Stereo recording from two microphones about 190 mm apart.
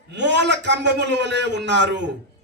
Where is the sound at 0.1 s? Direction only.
65° right (ahead or behind).